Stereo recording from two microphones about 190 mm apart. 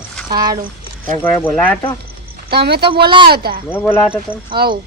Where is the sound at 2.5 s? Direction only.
55° right (ahead or behind).